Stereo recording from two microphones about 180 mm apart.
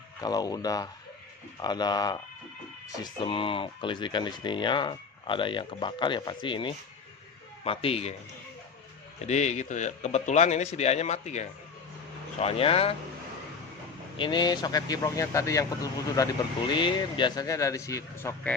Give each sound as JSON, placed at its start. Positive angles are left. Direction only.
{"t": 0.2, "sound": "speech", "side_deg": 20}
{"t": 9.2, "sound": "speech", "side_deg": 40}
{"t": 14.2, "sound": "speech", "side_deg": 25}